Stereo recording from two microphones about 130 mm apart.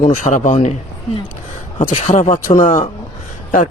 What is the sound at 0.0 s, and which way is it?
Speech, 70° left (ahead or behind).